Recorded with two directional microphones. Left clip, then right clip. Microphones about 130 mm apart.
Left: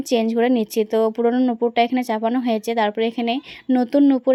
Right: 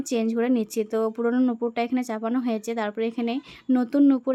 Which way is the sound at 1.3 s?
5° left (ahead or behind).